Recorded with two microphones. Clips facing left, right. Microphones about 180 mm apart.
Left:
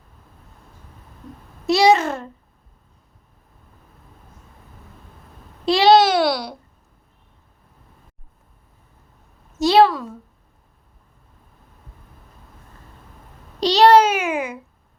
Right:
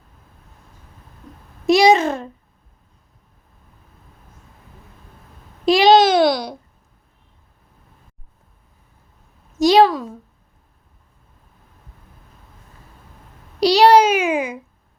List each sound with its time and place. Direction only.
1.6 s babbling: 15° right (ahead or behind)
5.6 s babbling: 15° right (ahead or behind)
9.6 s a sound: 15° right (ahead or behind)
13.6 s babbling: 10° right (ahead or behind)